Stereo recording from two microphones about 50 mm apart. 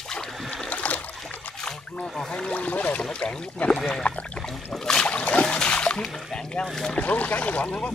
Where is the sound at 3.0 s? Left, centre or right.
Centre.